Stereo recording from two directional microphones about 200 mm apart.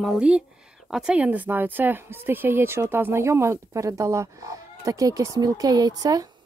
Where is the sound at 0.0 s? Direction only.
5° right (ahead or behind).